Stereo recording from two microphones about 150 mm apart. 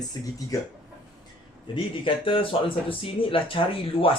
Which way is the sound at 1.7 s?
35° left (ahead or behind).